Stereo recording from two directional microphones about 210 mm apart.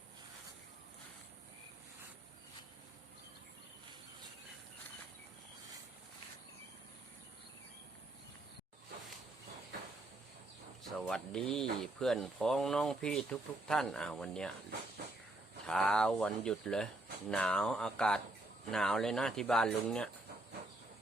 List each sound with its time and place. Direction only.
10.8 s speech: centre (ahead or behind)
15.6 s speech: 5° left (ahead or behind)